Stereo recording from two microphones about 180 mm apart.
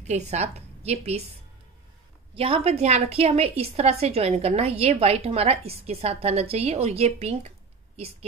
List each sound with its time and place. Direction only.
0.0 s a woman's voice: 40° right (ahead or behind)
2.3 s a woman's voice: 30° right (ahead or behind)